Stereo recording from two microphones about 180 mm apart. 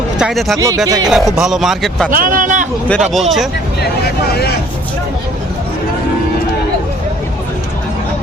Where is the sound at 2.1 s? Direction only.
50° right (ahead or behind).